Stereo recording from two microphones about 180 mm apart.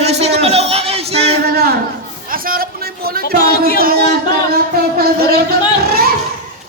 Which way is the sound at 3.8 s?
55° right (ahead or behind).